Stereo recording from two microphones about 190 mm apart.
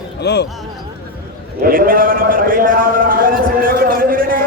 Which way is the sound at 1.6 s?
50° right (ahead or behind).